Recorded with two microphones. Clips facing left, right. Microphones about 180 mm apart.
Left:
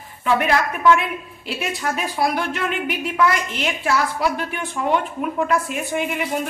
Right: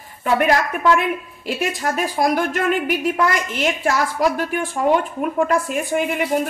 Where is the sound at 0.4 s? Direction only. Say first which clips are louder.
Right 2 dB; 45° right (ahead or behind).